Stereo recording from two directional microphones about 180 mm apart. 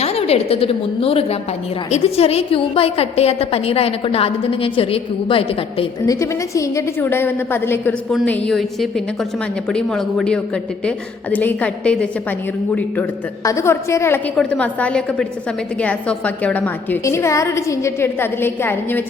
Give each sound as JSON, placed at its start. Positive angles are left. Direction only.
{"t": 0.0, "sound": "a woman's voice", "side_deg": 35}
{"t": 6.1, "sound": "a woman's voice", "side_deg": 15}